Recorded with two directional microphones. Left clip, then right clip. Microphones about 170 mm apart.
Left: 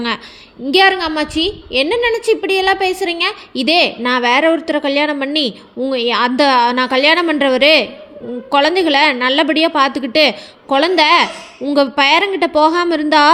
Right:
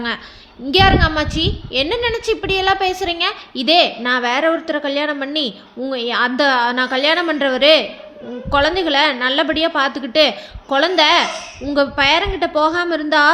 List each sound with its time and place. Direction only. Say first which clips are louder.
0.7 s a woman's voice: left 1 dB; 20° left (ahead or behind)